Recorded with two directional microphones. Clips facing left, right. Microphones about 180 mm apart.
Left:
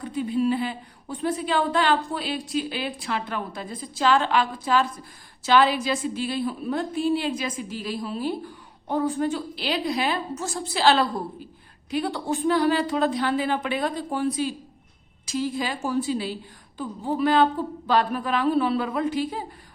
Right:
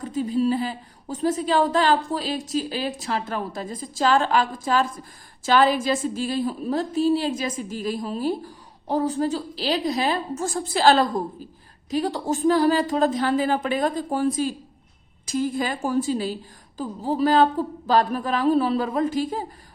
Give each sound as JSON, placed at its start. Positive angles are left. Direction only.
{"t": 0.0, "sound": "a woman's voice", "side_deg": -40}